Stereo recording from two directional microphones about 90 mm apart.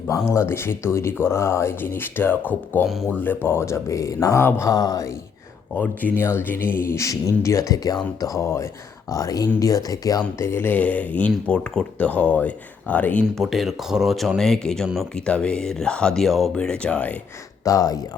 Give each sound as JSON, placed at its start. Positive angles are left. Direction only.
{"t": 0.3, "sound": "speech", "side_deg": 25}
{"t": 5.7, "sound": "speech", "side_deg": 20}
{"t": 10.4, "sound": "speech", "side_deg": 25}
{"t": 13.4, "sound": "speech", "side_deg": 0}
{"t": 17.7, "sound": "speech", "side_deg": 40}